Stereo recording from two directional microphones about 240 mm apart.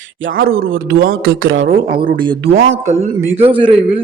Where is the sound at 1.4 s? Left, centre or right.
Right.